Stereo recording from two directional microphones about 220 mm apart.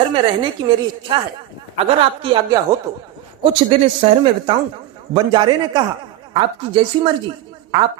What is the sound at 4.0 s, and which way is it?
A woman's voice, 25° right (ahead or behind).